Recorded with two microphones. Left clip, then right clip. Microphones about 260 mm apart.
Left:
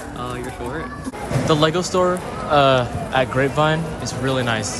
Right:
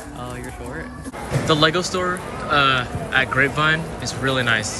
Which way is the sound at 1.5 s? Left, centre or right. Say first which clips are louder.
Even; centre.